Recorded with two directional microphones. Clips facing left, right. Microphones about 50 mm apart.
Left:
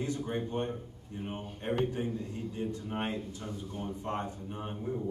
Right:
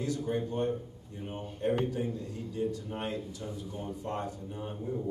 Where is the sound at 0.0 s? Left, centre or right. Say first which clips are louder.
Right 2 dB; left.